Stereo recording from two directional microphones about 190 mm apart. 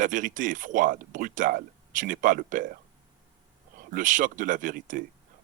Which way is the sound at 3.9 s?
45° right (ahead or behind).